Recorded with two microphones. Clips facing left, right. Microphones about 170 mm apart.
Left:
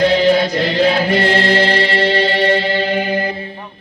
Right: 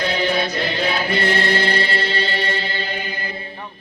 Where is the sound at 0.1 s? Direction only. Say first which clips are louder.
Left 8 dB; 90° left.